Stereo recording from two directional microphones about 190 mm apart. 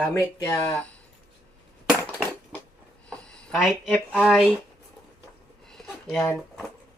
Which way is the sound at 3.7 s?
10° left (ahead or behind).